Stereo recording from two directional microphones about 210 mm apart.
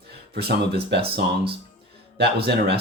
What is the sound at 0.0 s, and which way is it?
Speech, 50° right (ahead or behind).